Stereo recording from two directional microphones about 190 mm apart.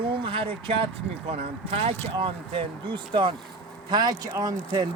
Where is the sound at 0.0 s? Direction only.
25° right (ahead or behind).